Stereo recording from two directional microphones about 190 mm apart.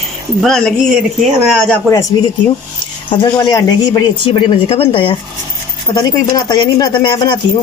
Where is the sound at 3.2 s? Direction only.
15° left (ahead or behind).